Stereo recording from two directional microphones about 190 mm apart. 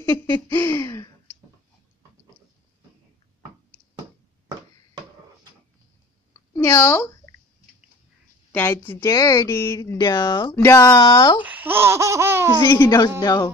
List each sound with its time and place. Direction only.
0.3 s speech: 10° left (ahead or behind)
6.5 s speech: 15° left (ahead or behind)
8.5 s speech: 10° left (ahead or behind)
11.4 s speech: 10° right (ahead or behind)
12.6 s a woman's voice: 20° left (ahead or behind)